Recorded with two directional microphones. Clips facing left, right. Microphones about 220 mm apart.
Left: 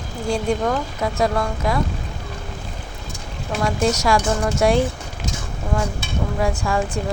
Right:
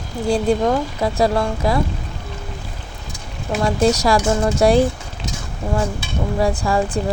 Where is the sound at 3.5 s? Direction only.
35° right (ahead or behind).